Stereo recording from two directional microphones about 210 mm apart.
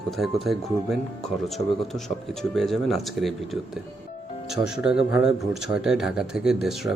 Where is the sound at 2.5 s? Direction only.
Centre (ahead or behind).